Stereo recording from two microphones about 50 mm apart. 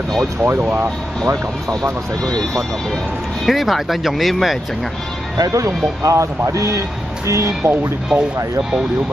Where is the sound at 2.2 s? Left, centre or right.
Centre.